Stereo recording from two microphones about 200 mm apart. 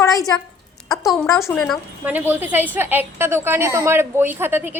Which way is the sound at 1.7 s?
10° right (ahead or behind).